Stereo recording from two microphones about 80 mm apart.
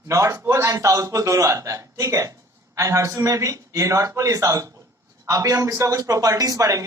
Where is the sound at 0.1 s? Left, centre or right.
Right.